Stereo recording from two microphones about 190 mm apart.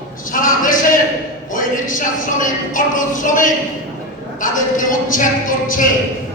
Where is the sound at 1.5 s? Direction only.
45° left (ahead or behind).